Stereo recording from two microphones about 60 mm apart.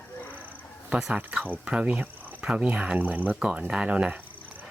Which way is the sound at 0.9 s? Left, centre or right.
Centre.